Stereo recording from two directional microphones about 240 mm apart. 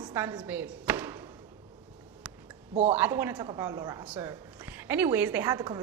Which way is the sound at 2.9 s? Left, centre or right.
Centre.